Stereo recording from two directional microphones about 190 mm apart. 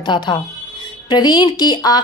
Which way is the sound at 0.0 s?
25° left (ahead or behind).